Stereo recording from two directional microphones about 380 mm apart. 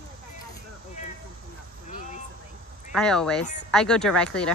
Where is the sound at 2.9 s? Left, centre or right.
Centre.